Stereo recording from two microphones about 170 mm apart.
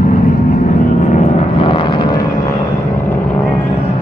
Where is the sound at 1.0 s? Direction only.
45° left (ahead or behind).